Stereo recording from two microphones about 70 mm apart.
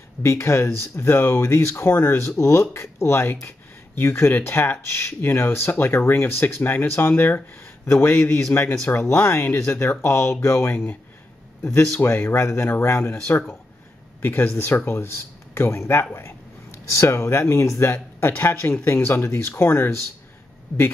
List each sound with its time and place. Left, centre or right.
0.2 s speech: left
14.2 s speech: left